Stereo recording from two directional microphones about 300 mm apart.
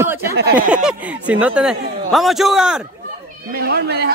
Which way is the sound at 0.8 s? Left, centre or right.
Centre.